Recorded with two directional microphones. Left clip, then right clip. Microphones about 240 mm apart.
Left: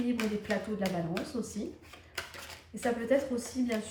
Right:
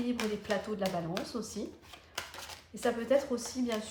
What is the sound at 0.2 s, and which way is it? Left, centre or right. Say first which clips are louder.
A woman's voice: even; centre.